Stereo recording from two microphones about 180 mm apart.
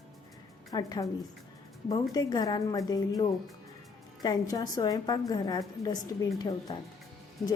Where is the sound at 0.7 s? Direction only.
20° left (ahead or behind).